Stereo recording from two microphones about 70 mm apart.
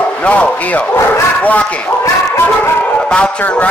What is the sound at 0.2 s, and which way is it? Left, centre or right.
A man's voice, centre.